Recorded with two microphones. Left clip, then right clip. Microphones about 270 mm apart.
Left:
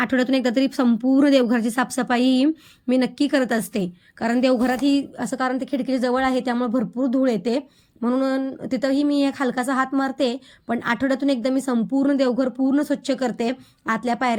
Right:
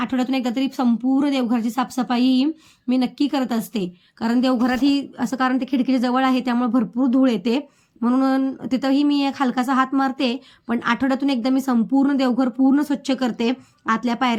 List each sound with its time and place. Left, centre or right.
0.0 s speech: centre